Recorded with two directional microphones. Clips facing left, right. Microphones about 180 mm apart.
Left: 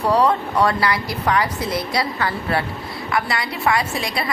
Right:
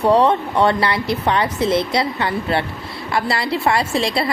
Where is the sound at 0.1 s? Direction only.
25° right (ahead or behind).